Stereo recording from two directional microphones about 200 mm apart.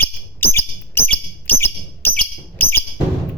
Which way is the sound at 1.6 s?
10° left (ahead or behind).